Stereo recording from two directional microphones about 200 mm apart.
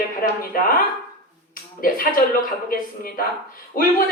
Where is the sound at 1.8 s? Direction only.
45° left (ahead or behind).